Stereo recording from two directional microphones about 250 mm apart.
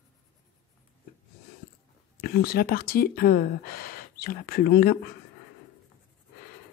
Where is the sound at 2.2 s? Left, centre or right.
Left.